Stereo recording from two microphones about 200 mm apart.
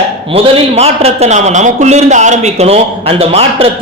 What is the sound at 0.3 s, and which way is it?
A man's voice, 30° right (ahead or behind).